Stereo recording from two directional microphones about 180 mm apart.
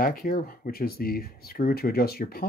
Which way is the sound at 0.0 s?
55° left (ahead or behind).